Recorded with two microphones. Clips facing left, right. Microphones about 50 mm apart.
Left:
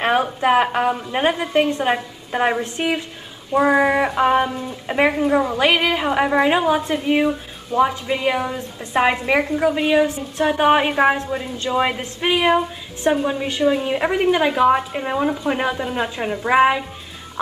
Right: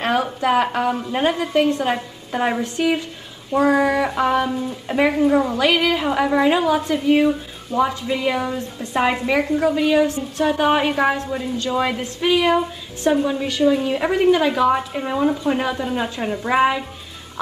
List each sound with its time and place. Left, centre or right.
0.0 s a sound: left
1.3 s a woman's voice: centre
11.5 s a woman's voice: left